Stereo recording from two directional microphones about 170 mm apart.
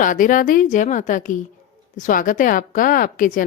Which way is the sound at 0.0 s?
50° left (ahead or behind).